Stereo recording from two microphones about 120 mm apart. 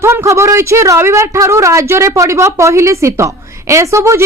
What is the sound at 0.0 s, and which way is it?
A woman's voice, 20° right (ahead or behind).